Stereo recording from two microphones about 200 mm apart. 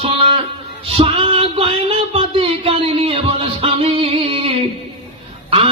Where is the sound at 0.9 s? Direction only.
25° right (ahead or behind).